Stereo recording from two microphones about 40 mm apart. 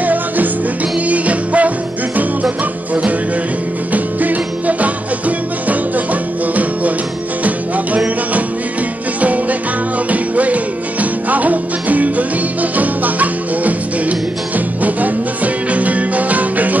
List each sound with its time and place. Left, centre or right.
0.0 s music: right
2.9 s music: right